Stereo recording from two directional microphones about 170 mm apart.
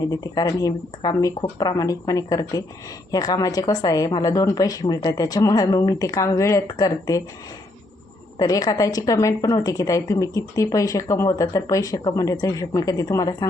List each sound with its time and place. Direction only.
0.1 s a woman's voice: 20° left (ahead or behind)
8.4 s a woman's voice: 20° left (ahead or behind)